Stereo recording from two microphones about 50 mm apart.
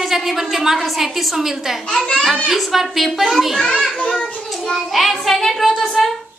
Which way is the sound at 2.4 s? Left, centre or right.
Centre.